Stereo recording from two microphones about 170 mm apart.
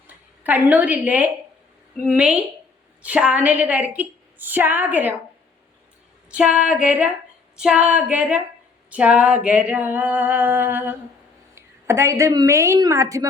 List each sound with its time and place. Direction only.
0.1 s a woman's voice: 10° right (ahead or behind)
6.3 s a woman's voice: 5° right (ahead or behind)